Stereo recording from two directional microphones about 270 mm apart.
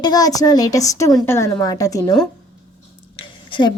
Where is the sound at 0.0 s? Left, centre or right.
Centre.